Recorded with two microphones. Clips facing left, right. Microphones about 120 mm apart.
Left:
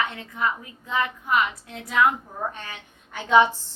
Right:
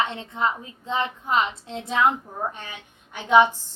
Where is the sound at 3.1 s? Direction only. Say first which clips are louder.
Right 1 dB; 15° right (ahead or behind).